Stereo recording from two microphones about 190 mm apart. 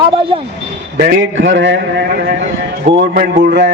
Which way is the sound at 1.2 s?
80° right.